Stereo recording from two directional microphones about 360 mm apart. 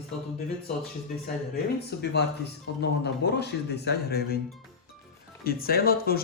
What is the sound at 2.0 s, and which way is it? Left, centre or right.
Speech, left.